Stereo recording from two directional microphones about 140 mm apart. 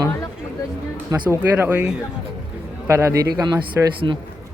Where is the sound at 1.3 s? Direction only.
15° right (ahead or behind); by 4.2 s 30° right (ahead or behind).